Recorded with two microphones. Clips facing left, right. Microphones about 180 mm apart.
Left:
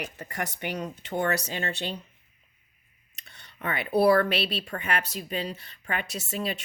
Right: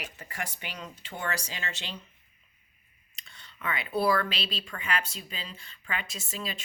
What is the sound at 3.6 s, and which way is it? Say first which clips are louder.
Speech: left 3 dB; 40° left (ahead or behind).